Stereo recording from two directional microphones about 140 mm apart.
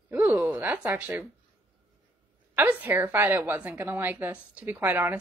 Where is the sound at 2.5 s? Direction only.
10° right (ahead or behind).